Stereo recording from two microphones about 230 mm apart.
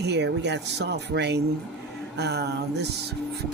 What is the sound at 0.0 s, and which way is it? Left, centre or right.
Speech, right.